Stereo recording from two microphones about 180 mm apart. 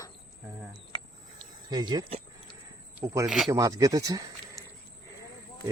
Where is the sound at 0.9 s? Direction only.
25° right (ahead or behind).